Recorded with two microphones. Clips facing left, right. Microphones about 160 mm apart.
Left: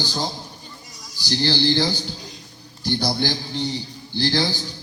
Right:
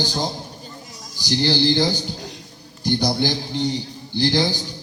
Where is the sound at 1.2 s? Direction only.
15° right (ahead or behind).